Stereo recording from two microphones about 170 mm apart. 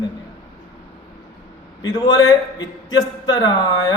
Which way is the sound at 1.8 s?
25° left (ahead or behind).